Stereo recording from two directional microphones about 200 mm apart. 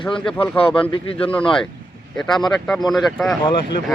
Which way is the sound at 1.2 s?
5° left (ahead or behind).